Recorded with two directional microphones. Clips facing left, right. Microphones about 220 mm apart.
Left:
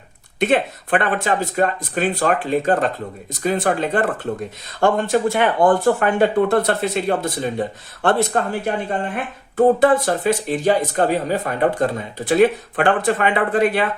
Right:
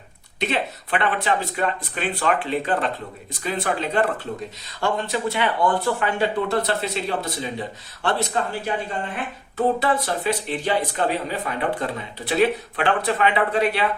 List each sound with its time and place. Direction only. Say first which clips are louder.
0.3 s speech: left 7 dB; 50° left (ahead or behind)